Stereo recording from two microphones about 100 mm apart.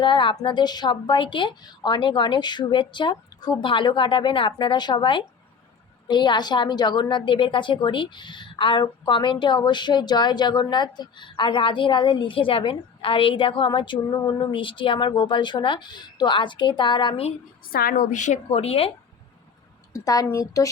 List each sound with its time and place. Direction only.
0.0 s a woman's voice: 55° left (ahead or behind)
18.5 s speech: 90° left
19.9 s a woman's voice: 35° left (ahead or behind)